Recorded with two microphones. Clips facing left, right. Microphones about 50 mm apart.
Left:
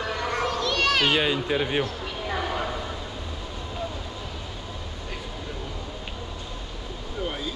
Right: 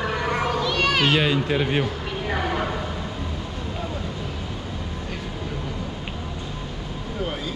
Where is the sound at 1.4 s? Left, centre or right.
Right.